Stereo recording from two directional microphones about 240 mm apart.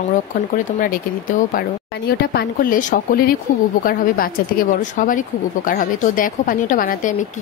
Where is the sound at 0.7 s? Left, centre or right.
Left.